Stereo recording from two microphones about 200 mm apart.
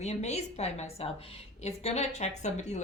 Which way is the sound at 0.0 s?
35° left (ahead or behind).